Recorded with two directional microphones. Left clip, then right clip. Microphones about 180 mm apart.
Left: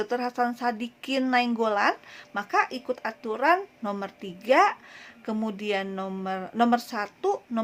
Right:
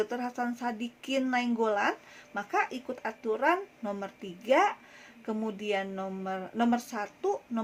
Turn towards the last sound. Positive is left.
turn(degrees=30)  # may be behind; listen again after turning